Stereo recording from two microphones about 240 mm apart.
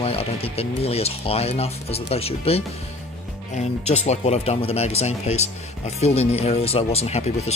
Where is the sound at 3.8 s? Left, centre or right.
Left.